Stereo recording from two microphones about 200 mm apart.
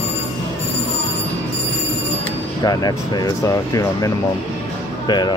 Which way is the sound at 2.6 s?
20° left (ahead or behind).